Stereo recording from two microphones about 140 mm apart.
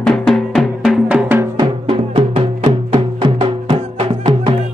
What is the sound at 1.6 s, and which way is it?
Music, 40° right (ahead or behind).